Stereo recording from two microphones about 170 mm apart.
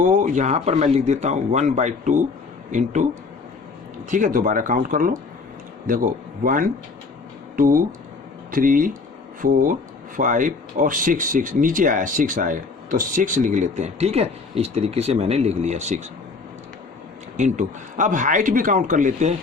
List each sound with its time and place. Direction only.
0.0 s speech: 45° right (ahead or behind)
4.1 s speech: 50° right (ahead or behind)
17.3 s speech: 45° right (ahead or behind)